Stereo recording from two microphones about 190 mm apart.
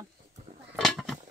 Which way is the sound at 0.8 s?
Centre (ahead or behind).